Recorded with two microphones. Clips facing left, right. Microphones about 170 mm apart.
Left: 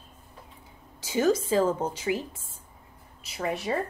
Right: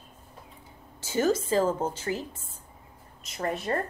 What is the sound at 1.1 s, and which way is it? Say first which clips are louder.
A woman's voice: left 1 dB; 10° left (ahead or behind).